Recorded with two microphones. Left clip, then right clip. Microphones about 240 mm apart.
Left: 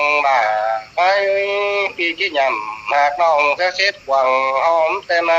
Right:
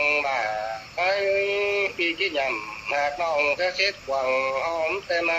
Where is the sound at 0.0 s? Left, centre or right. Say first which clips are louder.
Left 9 dB; left.